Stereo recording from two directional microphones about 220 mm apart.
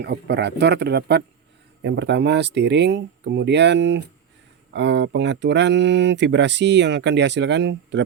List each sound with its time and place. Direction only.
0.0 s speech: 50° right (ahead or behind)